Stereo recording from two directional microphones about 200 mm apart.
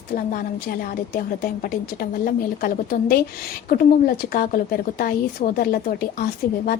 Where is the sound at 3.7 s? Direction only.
45° left (ahead or behind).